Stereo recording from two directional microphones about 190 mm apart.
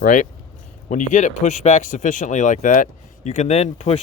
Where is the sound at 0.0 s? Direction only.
40° left (ahead or behind).